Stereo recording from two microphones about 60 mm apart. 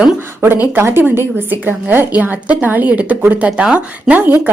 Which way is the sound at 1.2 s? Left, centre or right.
Right.